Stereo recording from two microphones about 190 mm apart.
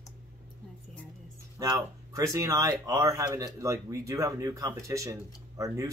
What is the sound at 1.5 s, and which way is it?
Speech, 20° right (ahead or behind).